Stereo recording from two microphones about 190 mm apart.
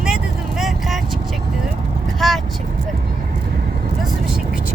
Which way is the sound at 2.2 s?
Centre (ahead or behind).